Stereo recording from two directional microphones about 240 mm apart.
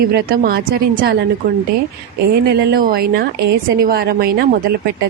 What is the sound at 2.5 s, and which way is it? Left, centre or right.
Speech, right.